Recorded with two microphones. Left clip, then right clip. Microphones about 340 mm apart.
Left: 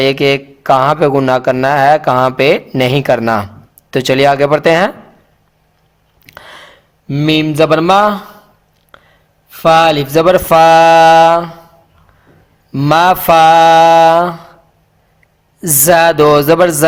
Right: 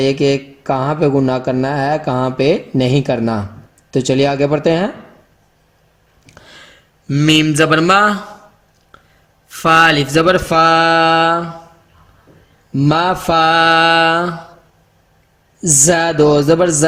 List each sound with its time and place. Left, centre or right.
0.0 s mantra: left
0.8 s speech: left
6.2 s a sound: left
9.5 s speech: centre
12.7 s speech: left
15.6 s speech: left